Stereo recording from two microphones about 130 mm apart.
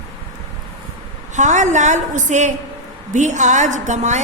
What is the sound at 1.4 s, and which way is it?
A woman's voice, 65° right (ahead or behind).